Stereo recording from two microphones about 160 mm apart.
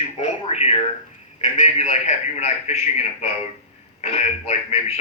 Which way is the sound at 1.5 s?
45° left (ahead or behind).